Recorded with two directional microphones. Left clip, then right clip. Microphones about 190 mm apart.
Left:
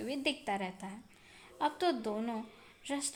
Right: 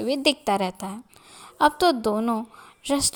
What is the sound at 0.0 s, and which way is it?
A woman's voice, 35° right (ahead or behind).